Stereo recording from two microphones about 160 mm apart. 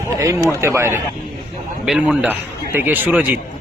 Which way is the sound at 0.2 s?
20° right (ahead or behind).